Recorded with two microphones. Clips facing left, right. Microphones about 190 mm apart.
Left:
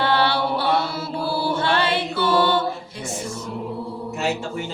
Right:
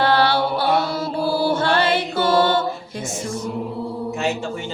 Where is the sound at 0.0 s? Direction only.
40° right (ahead or behind).